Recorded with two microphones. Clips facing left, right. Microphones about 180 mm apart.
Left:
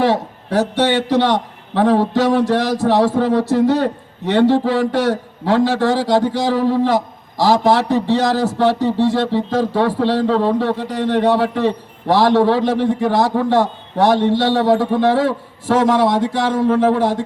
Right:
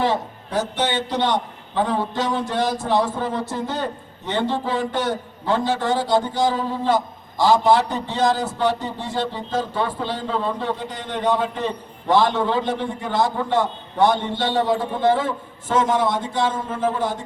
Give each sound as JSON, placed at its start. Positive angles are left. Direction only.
{"t": 0.0, "sound": "a sound", "side_deg": 75}
{"t": 0.8, "sound": "a man's voice", "side_deg": 75}
{"t": 3.2, "sound": "speech", "side_deg": 90}